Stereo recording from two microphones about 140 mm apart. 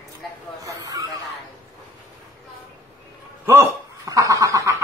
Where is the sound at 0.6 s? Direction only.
25° right (ahead or behind).